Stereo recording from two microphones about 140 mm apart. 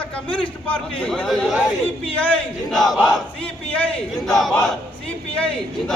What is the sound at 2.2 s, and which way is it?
A man's voice, 10° left (ahead or behind).